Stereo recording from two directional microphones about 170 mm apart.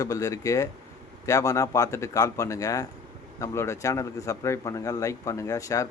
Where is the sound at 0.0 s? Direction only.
20° left (ahead or behind).